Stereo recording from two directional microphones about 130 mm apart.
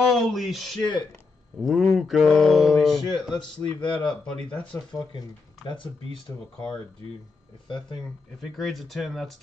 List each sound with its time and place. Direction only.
0.1 s speech: centre (ahead or behind)
3.8 s speech: 35° left (ahead or behind)
4.3 s speech: 10° left (ahead or behind)
4.7 s speech: 30° left (ahead or behind)
7.6 s speech: 35° left (ahead or behind)
8.5 s speech: centre (ahead or behind)